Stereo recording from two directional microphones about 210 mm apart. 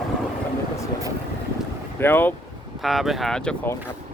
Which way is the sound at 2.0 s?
10° left (ahead or behind).